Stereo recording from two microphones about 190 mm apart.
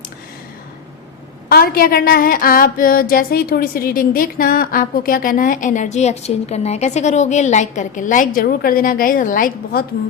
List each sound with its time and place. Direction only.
1.5 s a woman's voice: 55° left (ahead or behind)